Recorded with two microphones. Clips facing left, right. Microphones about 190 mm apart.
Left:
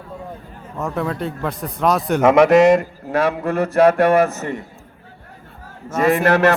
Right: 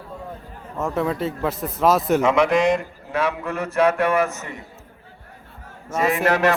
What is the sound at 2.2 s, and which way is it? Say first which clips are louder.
A man's voice: left 10 dB; 65° left (ahead or behind).